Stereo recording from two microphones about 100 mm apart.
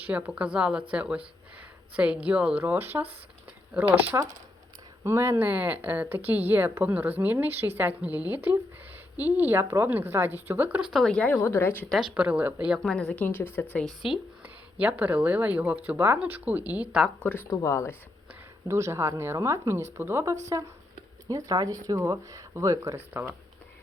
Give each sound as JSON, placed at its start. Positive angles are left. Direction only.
{"t": 0.0, "sound": "a woman's voice", "side_deg": -15}
{"t": 11.0, "sound": "speech", "side_deg": 5}
{"t": 11.3, "sound": "speech", "side_deg": 25}
{"t": 11.9, "sound": "speech", "side_deg": -5}
{"t": 12.8, "sound": "speech", "side_deg": 5}
{"t": 13.2, "sound": "speech", "side_deg": 20}
{"t": 13.8, "sound": "speech", "side_deg": -5}
{"t": 17.2, "sound": "speech", "side_deg": 15}
{"t": 17.5, "sound": "speech", "side_deg": 30}
{"t": 18.7, "sound": "speech", "side_deg": -25}